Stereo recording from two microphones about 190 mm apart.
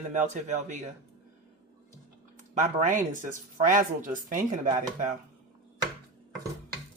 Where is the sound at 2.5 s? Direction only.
40° right (ahead or behind).